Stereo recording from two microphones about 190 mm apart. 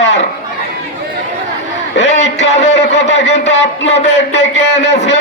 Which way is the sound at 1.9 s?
65° left (ahead or behind).